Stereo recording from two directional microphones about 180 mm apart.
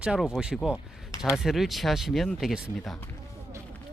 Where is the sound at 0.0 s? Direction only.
5° right (ahead or behind).